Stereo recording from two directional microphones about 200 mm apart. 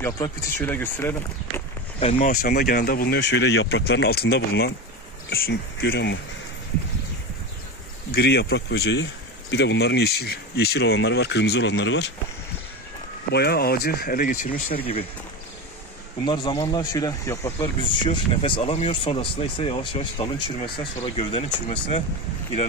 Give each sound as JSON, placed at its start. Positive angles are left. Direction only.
{"t": 0.0, "sound": "speech", "side_deg": 10}
{"t": 2.1, "sound": "speech", "side_deg": 45}
{"t": 8.1, "sound": "speech", "side_deg": 55}
{"t": 13.3, "sound": "speech", "side_deg": 55}
{"t": 14.8, "sound": "speech", "side_deg": 30}
{"t": 16.3, "sound": "speech", "side_deg": 20}